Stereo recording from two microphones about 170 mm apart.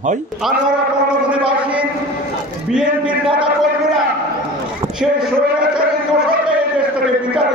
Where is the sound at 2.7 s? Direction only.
5° right (ahead or behind).